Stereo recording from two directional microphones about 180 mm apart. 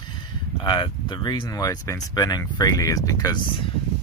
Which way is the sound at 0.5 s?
25° left (ahead or behind).